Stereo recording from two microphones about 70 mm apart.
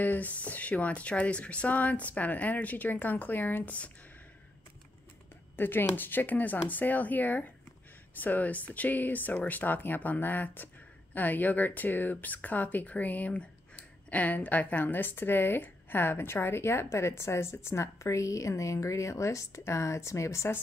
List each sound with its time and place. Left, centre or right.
0.0 s speech: left
5.6 s a woman's voice: left